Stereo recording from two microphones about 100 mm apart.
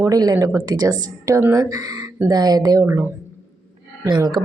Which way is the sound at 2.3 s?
40° right (ahead or behind).